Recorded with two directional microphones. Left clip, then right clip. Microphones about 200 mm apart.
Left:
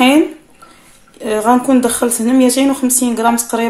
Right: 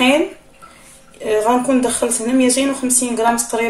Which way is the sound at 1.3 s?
40° left (ahead or behind).